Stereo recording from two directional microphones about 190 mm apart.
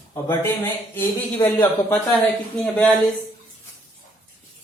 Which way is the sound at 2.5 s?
5° left (ahead or behind).